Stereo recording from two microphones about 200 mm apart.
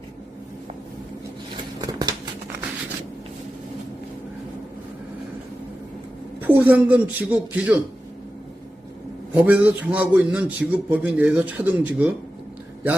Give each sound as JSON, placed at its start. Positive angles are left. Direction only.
{"t": 1.8, "sound": "a sound", "side_deg": -20}
{"t": 6.4, "sound": "a man's voice", "side_deg": -10}
{"t": 9.3, "sound": "a man's voice", "side_deg": -10}